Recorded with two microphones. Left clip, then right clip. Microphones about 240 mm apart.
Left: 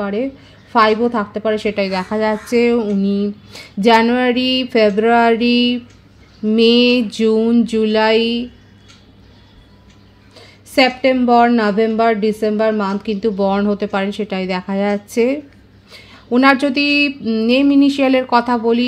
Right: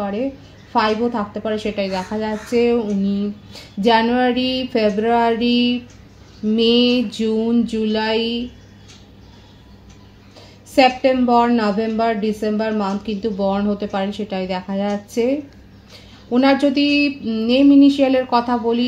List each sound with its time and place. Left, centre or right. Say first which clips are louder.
0.0 s a woman's voice: left 2 dB; left
10.7 s a woman's voice: left 1 dB; left